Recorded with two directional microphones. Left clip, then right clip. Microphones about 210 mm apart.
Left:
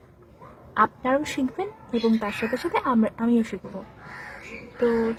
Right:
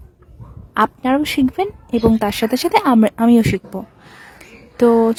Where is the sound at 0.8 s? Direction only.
45° right (ahead or behind).